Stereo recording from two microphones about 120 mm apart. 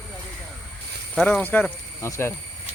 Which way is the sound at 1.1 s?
10° left (ahead or behind).